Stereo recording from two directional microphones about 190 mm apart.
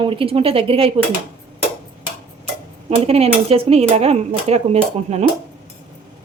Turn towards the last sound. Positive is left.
turn(degrees=-35)  # may be behind; listen again after turning